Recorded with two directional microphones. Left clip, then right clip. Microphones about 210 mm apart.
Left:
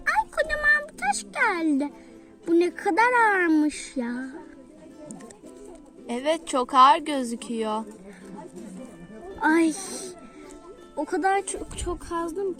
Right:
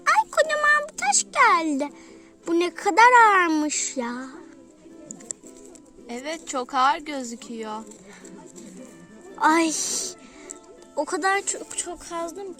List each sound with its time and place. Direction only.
0.0 s a sound: 45° right (ahead or behind)
2.5 s a child's voice: 45° right (ahead or behind)
6.1 s a woman's voice: 25° left (ahead or behind)
9.4 s a child's voice: 45° right (ahead or behind)